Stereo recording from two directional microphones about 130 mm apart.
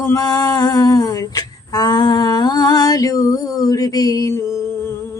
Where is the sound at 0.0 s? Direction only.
25° left (ahead or behind).